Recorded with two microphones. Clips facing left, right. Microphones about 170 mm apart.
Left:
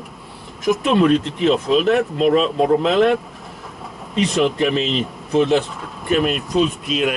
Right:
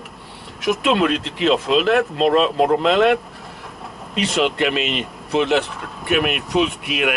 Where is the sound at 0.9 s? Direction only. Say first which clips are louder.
Left 4 dB; 85° right.